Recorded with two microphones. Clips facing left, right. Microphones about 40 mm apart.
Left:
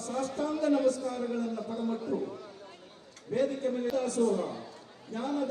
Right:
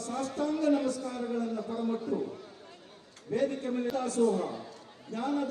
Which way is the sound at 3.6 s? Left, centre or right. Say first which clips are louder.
Left 1 dB; right.